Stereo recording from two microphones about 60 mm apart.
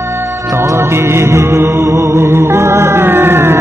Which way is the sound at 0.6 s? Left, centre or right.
Right.